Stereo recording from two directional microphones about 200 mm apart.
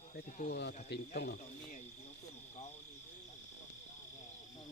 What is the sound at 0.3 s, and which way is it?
Speech, 40° left (ahead or behind).